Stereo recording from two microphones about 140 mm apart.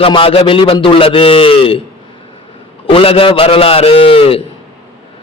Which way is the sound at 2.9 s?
40° left (ahead or behind).